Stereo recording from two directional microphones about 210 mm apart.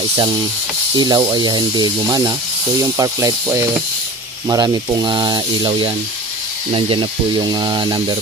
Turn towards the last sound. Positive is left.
turn(degrees=-20)  # may be behind; listen again after turning